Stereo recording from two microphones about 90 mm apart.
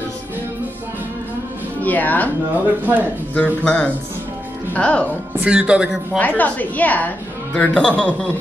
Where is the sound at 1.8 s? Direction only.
20° left (ahead or behind).